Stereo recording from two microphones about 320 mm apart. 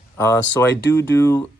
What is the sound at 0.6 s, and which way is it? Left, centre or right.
Speech, centre.